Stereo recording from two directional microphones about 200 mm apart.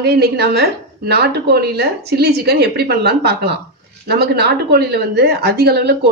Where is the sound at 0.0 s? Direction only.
55° right (ahead or behind).